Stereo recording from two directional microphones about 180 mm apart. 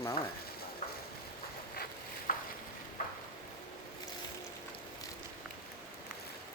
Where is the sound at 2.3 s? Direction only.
50° left (ahead or behind).